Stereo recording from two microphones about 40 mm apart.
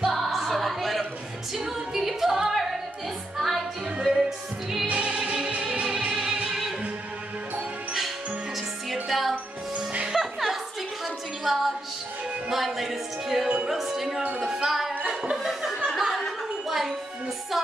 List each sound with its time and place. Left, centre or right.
0.1 s music: centre
4.8 s music: right
9.0 s music: centre
15.3 s chuckle: centre
16.0 s music: centre